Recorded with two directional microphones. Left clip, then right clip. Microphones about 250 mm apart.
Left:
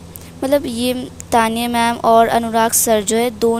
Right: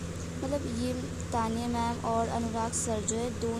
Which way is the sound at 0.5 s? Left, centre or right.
Left.